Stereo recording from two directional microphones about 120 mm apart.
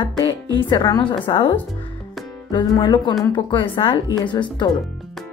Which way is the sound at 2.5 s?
35° left (ahead or behind).